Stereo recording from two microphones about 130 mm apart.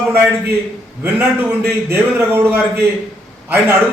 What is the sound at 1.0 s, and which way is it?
A man's voice, 15° right (ahead or behind).